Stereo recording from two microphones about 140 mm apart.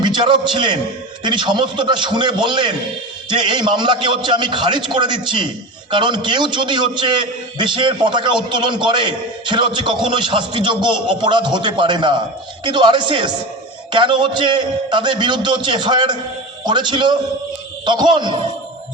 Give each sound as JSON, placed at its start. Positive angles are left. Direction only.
{"t": 0.0, "sound": "a man's voice", "side_deg": -35}